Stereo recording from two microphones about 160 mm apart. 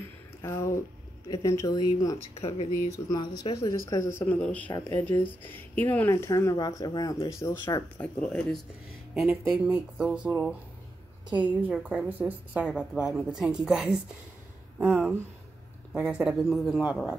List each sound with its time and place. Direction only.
0.4 s speech: 15° left (ahead or behind)
2.4 s speech: 40° left (ahead or behind)
2.9 s speech: 25° left (ahead or behind)
8.0 s speech: 5° left (ahead or behind)
9.7 s speech: 10° right (ahead or behind)
11.3 s a woman's voice: 10° right (ahead or behind)